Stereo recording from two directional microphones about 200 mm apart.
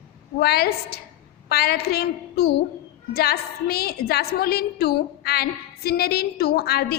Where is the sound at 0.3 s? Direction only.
50° left (ahead or behind).